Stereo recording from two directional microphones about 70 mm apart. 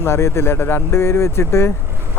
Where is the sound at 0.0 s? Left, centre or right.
Left.